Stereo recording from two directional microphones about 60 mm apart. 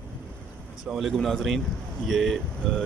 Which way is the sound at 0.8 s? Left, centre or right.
Centre.